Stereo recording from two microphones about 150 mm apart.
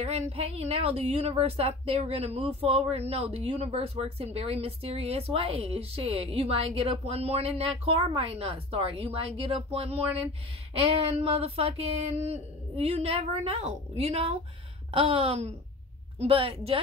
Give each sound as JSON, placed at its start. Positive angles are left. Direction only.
{"t": 0.0, "sound": "a woman's voice", "side_deg": -45}